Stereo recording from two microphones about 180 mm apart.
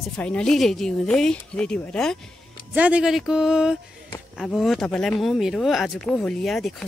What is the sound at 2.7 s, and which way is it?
Speech, 5° right (ahead or behind).